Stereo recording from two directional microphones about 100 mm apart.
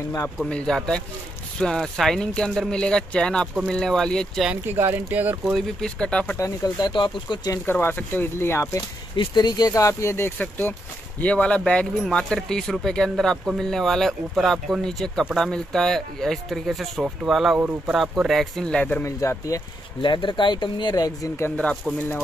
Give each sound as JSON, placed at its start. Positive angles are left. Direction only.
{"t": 0.4, "sound": "speech", "side_deg": 10}
{"t": 4.7, "sound": "speech", "side_deg": -20}
{"t": 5.8, "sound": "speech", "side_deg": 10}
{"t": 6.3, "sound": "speech", "side_deg": 30}
{"t": 6.8, "sound": "speech", "side_deg": 50}
{"t": 7.8, "sound": "speech", "side_deg": 20}
{"t": 9.1, "sound": "speech", "side_deg": 50}
{"t": 11.1, "sound": "speech", "side_deg": 10}
{"t": 17.6, "sound": "speech", "side_deg": -15}
{"t": 17.9, "sound": "speech", "side_deg": -5}
{"t": 19.0, "sound": "speech", "side_deg": 30}
{"t": 20.0, "sound": "speech", "side_deg": 50}